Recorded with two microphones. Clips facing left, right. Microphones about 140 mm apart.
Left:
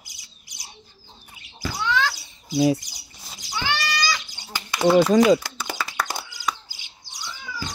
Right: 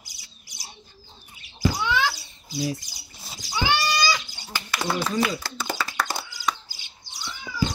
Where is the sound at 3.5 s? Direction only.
10° right (ahead or behind).